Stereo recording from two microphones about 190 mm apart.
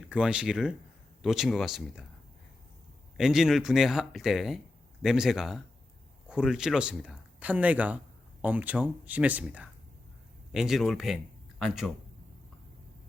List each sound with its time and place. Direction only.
0.0 s speech: 5° right (ahead or behind)
3.2 s speech: 5° right (ahead or behind)